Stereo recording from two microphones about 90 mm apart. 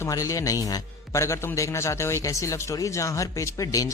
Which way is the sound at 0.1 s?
40° left (ahead or behind).